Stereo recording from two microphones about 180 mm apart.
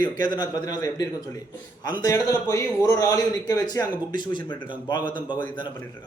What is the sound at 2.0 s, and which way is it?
Speech, 20° left (ahead or behind).